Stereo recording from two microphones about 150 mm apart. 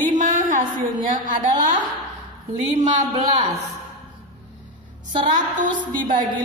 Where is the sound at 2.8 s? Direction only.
50° right (ahead or behind).